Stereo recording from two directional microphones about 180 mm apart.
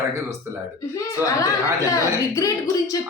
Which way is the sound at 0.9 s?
20° left (ahead or behind).